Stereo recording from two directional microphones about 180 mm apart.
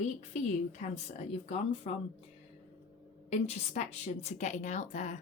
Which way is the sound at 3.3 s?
35° left (ahead or behind).